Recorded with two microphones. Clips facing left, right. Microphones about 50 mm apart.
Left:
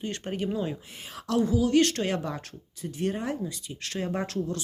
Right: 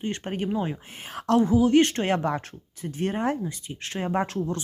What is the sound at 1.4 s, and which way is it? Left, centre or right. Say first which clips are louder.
Speech: right 2 dB; right.